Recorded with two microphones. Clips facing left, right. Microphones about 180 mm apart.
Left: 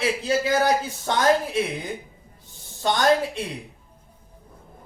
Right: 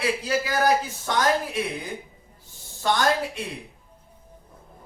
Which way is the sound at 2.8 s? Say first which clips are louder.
Left 3 dB; 20° left (ahead or behind).